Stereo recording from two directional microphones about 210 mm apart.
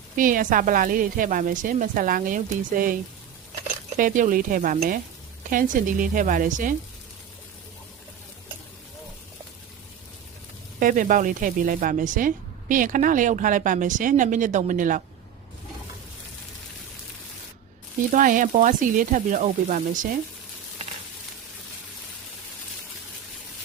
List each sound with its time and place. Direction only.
0.2 s a woman's voice: 40° right (ahead or behind)
10.8 s a woman's voice: 40° right (ahead or behind)
18.1 s a woman's voice: 40° right (ahead or behind)